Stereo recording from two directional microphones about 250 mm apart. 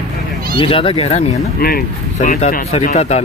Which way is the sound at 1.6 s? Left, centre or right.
Left.